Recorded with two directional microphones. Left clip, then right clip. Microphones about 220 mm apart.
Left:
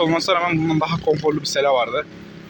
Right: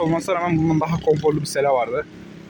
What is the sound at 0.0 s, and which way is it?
Speech, 10° right (ahead or behind).